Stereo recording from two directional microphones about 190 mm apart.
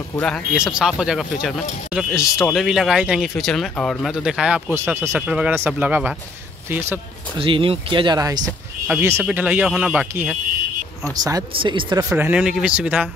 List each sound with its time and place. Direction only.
0.1 s speech: 5° left (ahead or behind)
7.3 s speech: 25° right (ahead or behind); by 10.3 s 5° right (ahead or behind)
11.2 s speech: 25° right (ahead or behind)
12.1 s speech: 10° right (ahead or behind)